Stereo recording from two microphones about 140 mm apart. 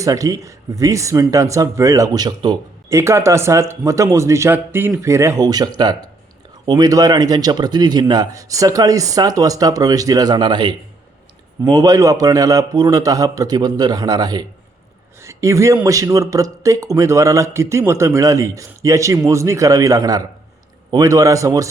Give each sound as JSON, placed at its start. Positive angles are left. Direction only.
{"t": 0.0, "sound": "a man's voice", "side_deg": -25}
{"t": 2.9, "sound": "a man's voice", "side_deg": -20}